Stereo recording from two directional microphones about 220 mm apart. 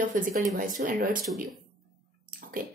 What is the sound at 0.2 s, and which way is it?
A woman's voice, 40° right (ahead or behind).